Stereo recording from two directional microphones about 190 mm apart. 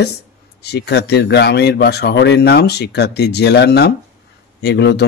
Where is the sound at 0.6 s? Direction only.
60° left (ahead or behind).